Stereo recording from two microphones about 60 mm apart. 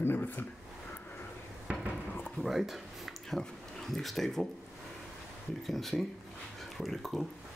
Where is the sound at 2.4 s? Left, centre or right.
Centre.